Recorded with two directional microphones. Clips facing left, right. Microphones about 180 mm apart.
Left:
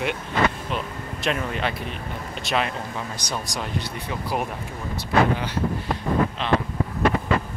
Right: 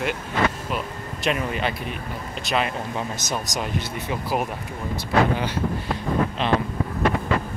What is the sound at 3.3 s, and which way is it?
Speech, 10° right (ahead or behind).